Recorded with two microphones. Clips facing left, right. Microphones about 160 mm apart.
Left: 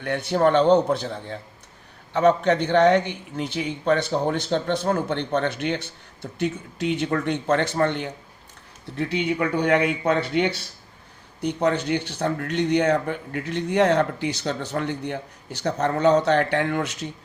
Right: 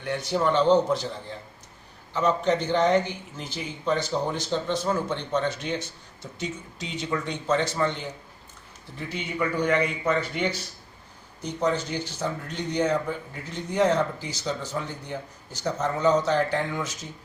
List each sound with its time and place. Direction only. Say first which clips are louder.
0.0 s speech: left 5 dB; 60° left (ahead or behind)